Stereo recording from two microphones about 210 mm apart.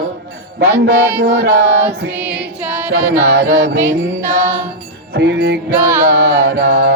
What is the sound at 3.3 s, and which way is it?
Mantra, 45° right (ahead or behind).